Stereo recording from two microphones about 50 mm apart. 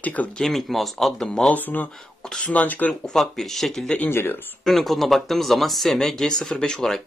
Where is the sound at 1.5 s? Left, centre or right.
Left.